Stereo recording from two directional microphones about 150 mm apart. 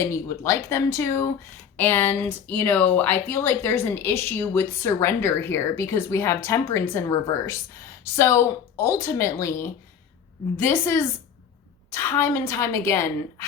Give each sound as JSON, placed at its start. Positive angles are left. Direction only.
{"t": 0.0, "sound": "a woman's voice", "side_deg": 15}